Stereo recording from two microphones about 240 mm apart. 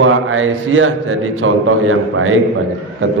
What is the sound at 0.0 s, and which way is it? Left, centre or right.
A man's voice, right.